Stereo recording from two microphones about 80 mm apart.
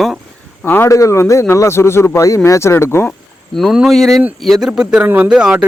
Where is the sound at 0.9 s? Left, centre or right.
Left.